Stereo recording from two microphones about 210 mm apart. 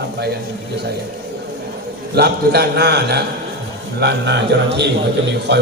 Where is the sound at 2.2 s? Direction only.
50° right (ahead or behind).